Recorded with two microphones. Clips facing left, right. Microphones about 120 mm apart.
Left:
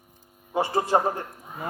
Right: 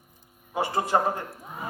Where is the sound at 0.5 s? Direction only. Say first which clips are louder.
Left 2 dB; 25° left (ahead or behind).